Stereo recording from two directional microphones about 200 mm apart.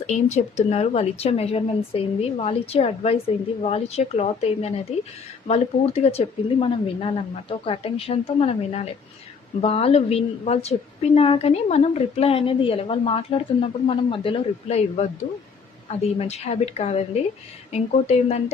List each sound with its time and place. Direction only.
0.1 s a woman's voice: 35° left (ahead or behind)